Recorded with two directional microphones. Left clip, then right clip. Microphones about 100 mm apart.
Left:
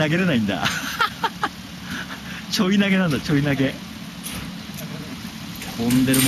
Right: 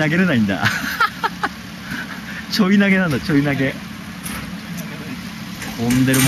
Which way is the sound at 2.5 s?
15° left (ahead or behind).